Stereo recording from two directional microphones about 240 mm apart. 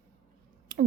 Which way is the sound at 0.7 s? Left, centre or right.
Right.